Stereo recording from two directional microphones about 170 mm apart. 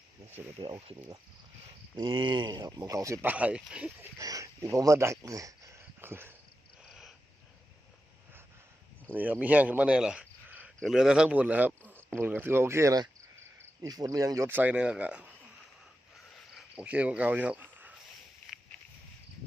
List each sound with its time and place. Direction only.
0.6 s speech: 30° right (ahead or behind)
2.0 s speech: 30° right (ahead or behind); by 4.1 s 5° right (ahead or behind)
4.2 s speech: 20° right (ahead or behind)
5.2 s cricket: 20° right (ahead or behind)
6.8 s a sound: centre (ahead or behind)
9.0 s speech: 10° right (ahead or behind)
16.2 s cricket: centre (ahead or behind)